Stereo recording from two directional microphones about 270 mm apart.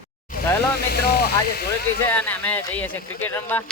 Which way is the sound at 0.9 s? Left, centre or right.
Left.